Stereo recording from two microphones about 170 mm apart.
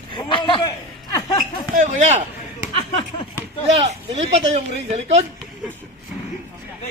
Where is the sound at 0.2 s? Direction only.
30° left (ahead or behind).